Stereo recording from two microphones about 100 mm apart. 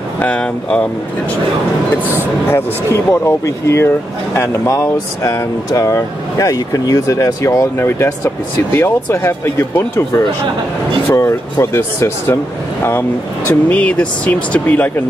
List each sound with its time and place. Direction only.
0.2 s speech: 10° left (ahead or behind)
2.4 s speech: 20° left (ahead or behind)
13.7 s speech: 15° left (ahead or behind)